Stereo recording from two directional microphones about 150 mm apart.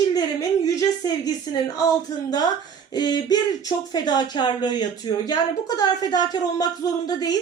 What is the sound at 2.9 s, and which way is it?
Speech, 25° left (ahead or behind).